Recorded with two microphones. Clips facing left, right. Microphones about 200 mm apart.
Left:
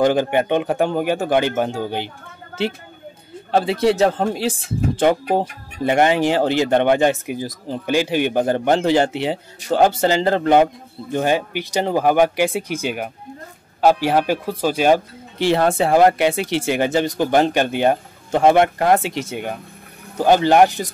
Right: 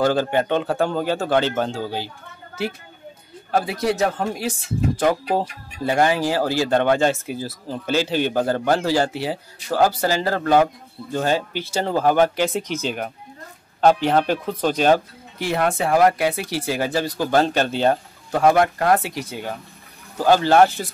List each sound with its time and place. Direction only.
0.0 s speech: 15° left (ahead or behind)
3.5 s speech: 25° left (ahead or behind); by 15.0 s 10° left (ahead or behind)
15.3 s speech: 30° left (ahead or behind)
18.3 s speech: 25° left (ahead or behind)